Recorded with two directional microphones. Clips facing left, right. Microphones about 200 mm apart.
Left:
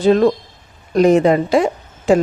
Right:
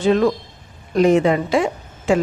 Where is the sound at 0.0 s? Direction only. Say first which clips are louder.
Left 3 dB; 35° left (ahead or behind).